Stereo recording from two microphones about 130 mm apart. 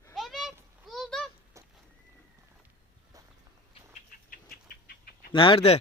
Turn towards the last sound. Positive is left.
turn(degrees=45)  # may be behind; listen again after turning